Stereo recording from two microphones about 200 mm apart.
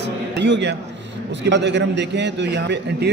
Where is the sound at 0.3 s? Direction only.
60° right (ahead or behind).